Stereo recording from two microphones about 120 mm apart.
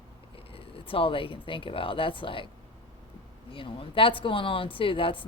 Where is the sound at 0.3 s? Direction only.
50° left (ahead or behind).